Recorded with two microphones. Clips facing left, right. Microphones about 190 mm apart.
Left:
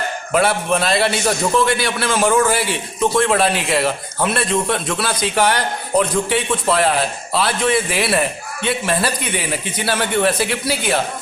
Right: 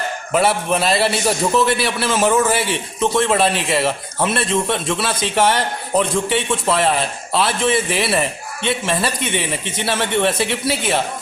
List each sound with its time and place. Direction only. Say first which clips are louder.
0.3 s a man's voice: even; centre (ahead or behind)